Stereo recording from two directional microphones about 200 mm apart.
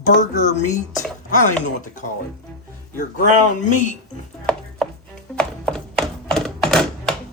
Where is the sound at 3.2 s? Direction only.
40° left (ahead or behind).